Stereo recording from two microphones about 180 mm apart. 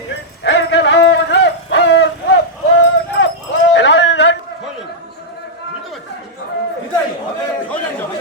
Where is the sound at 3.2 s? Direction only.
75° left (ahead or behind).